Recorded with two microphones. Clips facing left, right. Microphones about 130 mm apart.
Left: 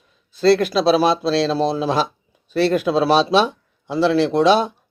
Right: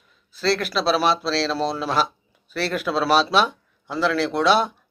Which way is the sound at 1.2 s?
20° left (ahead or behind).